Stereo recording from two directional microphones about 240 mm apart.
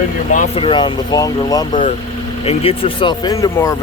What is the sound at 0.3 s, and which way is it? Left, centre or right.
Speech, left.